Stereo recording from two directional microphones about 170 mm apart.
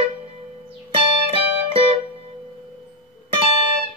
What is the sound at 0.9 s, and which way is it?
Music, 35° right (ahead or behind).